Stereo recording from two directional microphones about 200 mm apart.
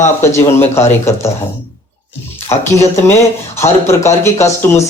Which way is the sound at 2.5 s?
15° left (ahead or behind).